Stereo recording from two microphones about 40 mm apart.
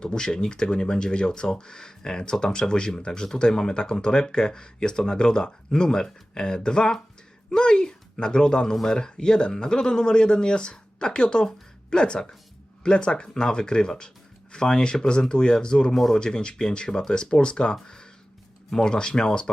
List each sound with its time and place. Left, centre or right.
0.0 s speech: left
17.8 s a sound: centre
18.7 s speech: centre